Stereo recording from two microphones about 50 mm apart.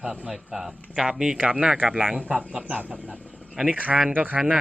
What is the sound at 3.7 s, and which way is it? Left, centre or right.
Speech, right.